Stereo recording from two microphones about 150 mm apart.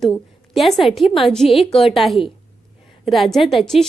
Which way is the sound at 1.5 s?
40° left (ahead or behind).